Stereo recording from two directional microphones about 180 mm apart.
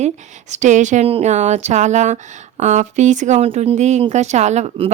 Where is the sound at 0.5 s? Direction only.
40° right (ahead or behind).